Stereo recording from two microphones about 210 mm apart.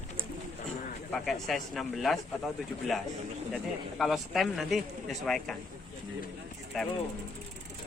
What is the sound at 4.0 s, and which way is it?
Speech, centre (ahead or behind).